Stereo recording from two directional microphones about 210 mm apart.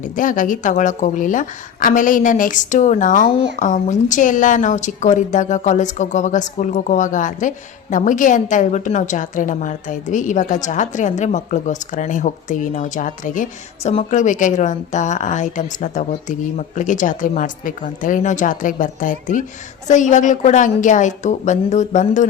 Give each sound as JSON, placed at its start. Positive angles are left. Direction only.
{"t": 0.0, "sound": "speech", "side_deg": 40}